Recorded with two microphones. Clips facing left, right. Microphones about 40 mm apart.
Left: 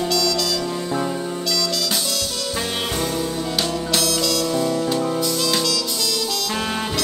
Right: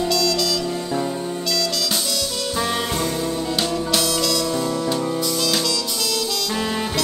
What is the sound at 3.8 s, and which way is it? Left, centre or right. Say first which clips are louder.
Music: even; centre.